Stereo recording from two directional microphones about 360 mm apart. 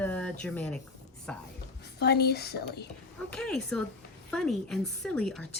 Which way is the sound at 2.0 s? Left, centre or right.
Left.